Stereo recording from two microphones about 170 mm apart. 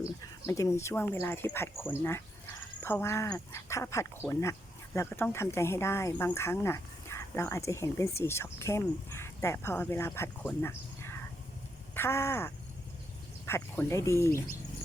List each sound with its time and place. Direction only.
0.2 s speech: 20° left (ahead or behind)